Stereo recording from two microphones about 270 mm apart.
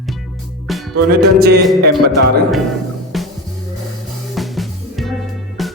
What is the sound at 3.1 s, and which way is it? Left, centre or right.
Music, centre.